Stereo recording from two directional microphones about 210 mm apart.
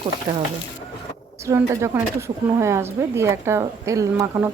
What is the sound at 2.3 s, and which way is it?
Speech, 30° right (ahead or behind).